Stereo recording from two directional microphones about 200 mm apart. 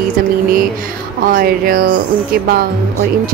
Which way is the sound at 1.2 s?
45° right (ahead or behind).